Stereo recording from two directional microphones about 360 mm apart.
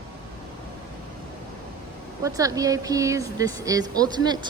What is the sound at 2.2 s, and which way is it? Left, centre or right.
Speech, centre.